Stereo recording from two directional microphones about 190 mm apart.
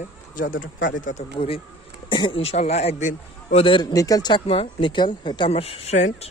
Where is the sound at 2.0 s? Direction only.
25° left (ahead or behind).